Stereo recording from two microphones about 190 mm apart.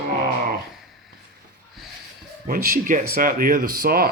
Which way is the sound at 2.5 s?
50° right (ahead or behind).